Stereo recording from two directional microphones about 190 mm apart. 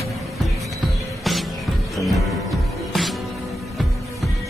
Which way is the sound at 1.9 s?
Centre (ahead or behind).